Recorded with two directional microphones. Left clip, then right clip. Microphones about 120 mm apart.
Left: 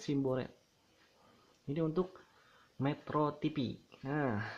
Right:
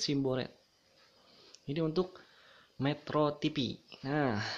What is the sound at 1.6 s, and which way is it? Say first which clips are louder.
Speech: right 2 dB; 15° right (ahead or behind).